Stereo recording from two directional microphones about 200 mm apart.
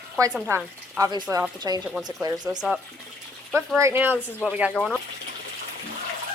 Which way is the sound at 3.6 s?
15° right (ahead or behind).